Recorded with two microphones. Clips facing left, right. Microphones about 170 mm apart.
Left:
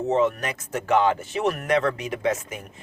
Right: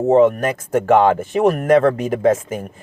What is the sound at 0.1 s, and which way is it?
Speech, 50° right (ahead or behind).